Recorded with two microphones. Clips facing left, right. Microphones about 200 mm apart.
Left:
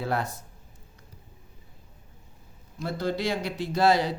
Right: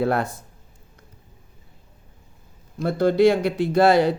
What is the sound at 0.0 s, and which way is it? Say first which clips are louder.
Speech: right 7 dB; 55° right (ahead or behind).